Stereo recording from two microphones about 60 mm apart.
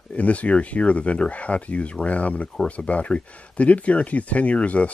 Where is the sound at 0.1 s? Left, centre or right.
Left.